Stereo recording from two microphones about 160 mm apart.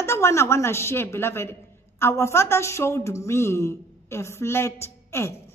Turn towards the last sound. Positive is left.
turn(degrees=15)  # may be behind; listen again after turning